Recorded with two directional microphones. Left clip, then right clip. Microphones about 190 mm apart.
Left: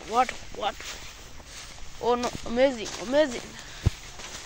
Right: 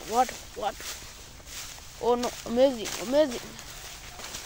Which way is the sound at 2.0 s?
15° right (ahead or behind).